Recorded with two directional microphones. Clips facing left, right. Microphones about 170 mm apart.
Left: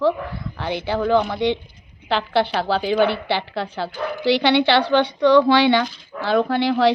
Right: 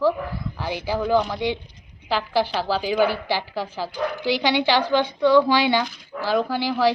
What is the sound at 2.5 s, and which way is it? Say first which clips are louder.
Speech: left 3 dB; 65° left (ahead or behind).